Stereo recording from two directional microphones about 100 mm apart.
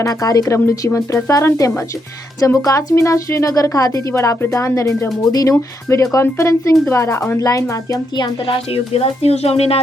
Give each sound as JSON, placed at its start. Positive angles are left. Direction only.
{"t": 0.0, "sound": "speech", "side_deg": 35}
{"t": 8.1, "sound": "a woman's voice", "side_deg": 55}